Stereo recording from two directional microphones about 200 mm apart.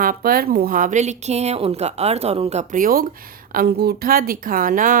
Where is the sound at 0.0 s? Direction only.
45° right (ahead or behind).